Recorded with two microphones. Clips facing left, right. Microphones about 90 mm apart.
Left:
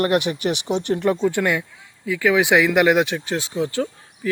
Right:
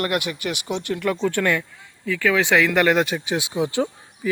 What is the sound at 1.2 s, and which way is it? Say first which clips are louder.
Speech: left 1 dB; 15° left (ahead or behind).